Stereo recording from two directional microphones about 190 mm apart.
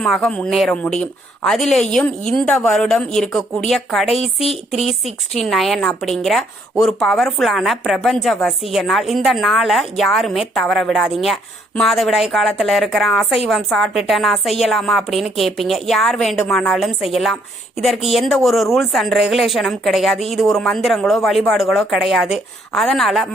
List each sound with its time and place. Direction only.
0.0 s a woman's voice: 5° left (ahead or behind)
4.2 s speech: 30° left (ahead or behind)
4.9 s a woman's voice: centre (ahead or behind)